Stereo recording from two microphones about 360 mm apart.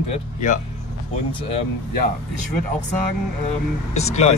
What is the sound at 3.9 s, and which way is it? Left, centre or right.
Speech, centre.